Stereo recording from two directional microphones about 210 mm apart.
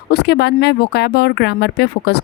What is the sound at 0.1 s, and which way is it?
Speech, 50° left (ahead or behind).